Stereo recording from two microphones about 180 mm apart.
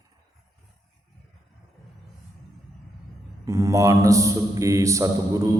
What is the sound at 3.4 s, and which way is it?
A man's voice, 15° right (ahead or behind).